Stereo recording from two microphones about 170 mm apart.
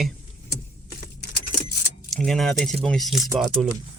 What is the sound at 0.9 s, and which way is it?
Keys jangling, 70° left (ahead or behind).